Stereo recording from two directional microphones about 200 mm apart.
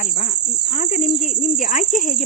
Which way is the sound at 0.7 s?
40° left (ahead or behind).